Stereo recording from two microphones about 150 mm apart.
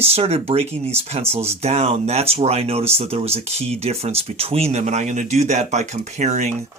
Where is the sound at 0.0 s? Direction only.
45° right (ahead or behind).